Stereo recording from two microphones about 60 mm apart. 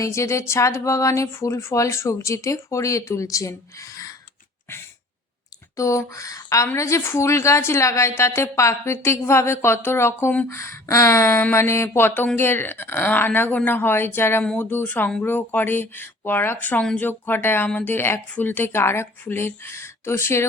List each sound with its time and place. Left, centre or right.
0.0 s a woman's voice: left
5.7 s a woman's voice: left
10.8 s a woman's voice: left